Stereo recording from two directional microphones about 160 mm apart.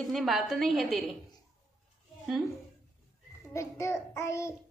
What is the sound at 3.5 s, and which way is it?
Child singing, 20° left (ahead or behind).